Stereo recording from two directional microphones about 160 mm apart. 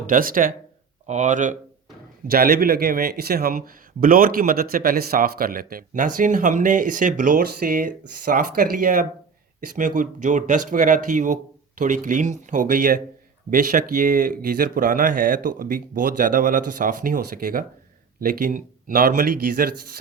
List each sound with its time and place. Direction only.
0.1 s speech: 60° right (ahead or behind)
1.0 s speech: 50° right (ahead or behind)
2.2 s speech: 70° right (ahead or behind)